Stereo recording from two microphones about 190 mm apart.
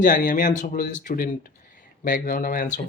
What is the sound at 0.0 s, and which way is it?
Speech, 45° left (ahead or behind).